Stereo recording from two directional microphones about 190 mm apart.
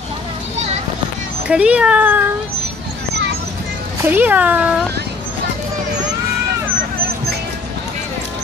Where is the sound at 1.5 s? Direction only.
5° right (ahead or behind).